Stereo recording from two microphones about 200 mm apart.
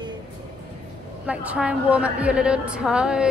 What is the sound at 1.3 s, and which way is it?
A woman's voice, 5° right (ahead or behind).